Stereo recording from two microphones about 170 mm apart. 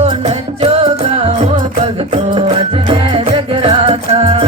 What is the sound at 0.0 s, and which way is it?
Music, 40° right (ahead or behind).